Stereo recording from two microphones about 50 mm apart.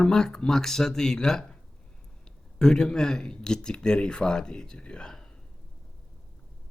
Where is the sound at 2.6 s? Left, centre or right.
Centre.